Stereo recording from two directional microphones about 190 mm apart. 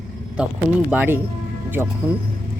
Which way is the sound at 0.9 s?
10° right (ahead or behind).